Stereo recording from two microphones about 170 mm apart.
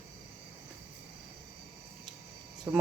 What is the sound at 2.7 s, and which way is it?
Speech, 10° right (ahead or behind).